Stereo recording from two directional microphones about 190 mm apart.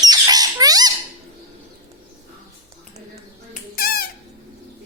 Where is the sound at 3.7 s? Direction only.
50° left (ahead or behind).